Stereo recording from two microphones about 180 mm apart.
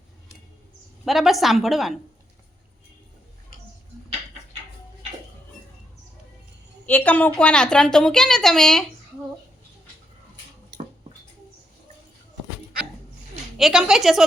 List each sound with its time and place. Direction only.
1.0 s a woman's voice: centre (ahead or behind)
6.8 s a woman's voice: 10° left (ahead or behind)
10.7 s a sound: 70° right (ahead or behind)
13.6 s a woman's voice: 5° right (ahead or behind)